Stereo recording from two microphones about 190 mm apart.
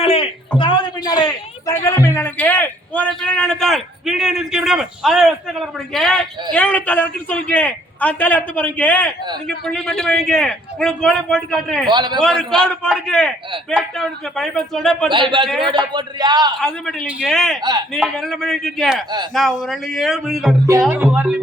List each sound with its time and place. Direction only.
0.0 s a sound: 30° left (ahead or behind)
0.6 s a man's voice: 25° left (ahead or behind); by 11.9 s centre (ahead or behind)
11.9 s a man's voice: 25° right (ahead or behind)
12.2 s a man's voice: 5° left (ahead or behind)
15.1 s a man's voice: 25° right (ahead or behind)
16.6 s a man's voice: 5° left (ahead or behind)
17.6 s a man's voice: 20° right (ahead or behind)
18.2 s a man's voice: centre (ahead or behind)